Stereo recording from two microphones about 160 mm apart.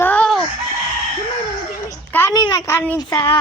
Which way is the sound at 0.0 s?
10° left (ahead or behind).